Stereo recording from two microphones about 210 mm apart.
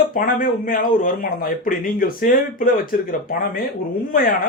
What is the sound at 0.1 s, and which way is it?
Speech, 40° left (ahead or behind).